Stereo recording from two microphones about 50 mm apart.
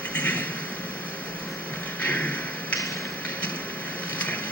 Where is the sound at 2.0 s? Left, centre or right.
Left.